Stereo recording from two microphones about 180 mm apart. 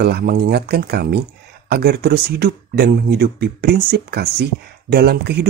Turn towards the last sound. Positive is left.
turn(degrees=-60)  # may be behind; listen again after turning